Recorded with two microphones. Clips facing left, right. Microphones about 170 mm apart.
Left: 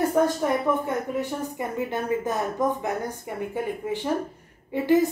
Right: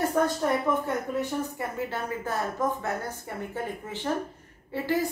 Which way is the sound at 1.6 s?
20° left (ahead or behind).